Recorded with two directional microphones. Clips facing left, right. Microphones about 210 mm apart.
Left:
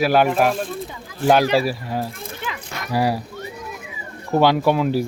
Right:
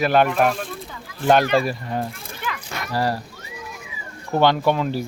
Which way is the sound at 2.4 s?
15° left (ahead or behind).